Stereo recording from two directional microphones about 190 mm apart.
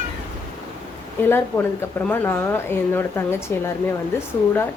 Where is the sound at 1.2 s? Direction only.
10° left (ahead or behind).